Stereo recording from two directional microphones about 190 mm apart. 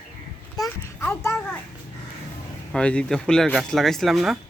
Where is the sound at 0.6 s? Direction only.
10° left (ahead or behind).